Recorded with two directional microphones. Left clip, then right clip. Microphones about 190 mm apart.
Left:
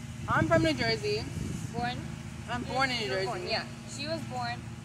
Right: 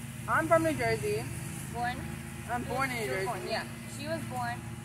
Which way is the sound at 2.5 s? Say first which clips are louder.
Left 2 dB; 30° left (ahead or behind).